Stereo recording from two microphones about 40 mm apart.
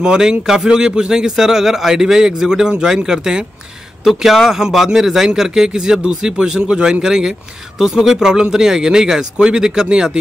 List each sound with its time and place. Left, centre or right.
0.0 s a man's voice: centre